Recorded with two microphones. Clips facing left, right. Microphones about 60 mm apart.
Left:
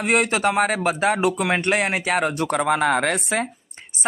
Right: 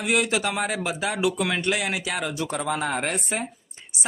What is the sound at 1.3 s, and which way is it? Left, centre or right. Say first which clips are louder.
Speech: left 4 dB; left.